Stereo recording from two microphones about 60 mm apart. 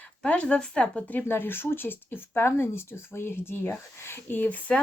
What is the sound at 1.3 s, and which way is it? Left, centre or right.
Speech, left.